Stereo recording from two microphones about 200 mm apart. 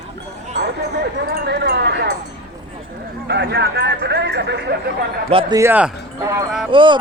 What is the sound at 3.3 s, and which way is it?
Speech, 60° right (ahead or behind).